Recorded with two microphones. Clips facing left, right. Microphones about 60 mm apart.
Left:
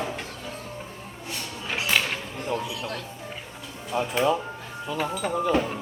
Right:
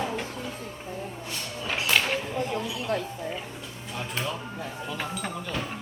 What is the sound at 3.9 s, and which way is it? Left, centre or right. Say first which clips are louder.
Speech: left 9 dB; centre.